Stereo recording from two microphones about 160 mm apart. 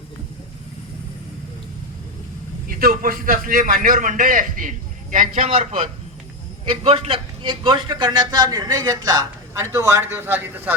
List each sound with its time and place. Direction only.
2.6 s a man's voice: 65° right (ahead or behind)
5.5 s a man's voice: 40° right (ahead or behind); by 10.8 s 10° right (ahead or behind)